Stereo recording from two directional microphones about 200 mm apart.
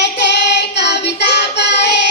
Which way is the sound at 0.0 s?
60° left (ahead or behind).